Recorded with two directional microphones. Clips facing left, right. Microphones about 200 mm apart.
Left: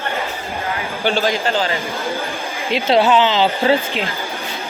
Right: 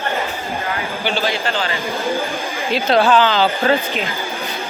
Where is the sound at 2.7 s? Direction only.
20° left (ahead or behind).